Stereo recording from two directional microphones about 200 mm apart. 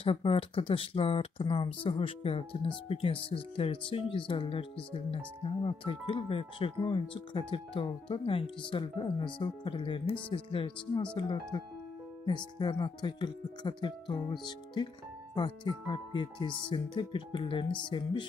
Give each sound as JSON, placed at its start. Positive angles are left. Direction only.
{"t": 0.0, "sound": "speech", "side_deg": 25}